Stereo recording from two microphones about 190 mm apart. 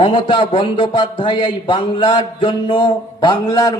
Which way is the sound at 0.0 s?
25° left (ahead or behind).